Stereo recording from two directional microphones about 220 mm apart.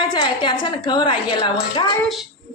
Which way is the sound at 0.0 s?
20° left (ahead or behind).